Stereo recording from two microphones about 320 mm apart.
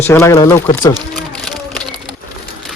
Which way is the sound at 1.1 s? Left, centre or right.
Centre.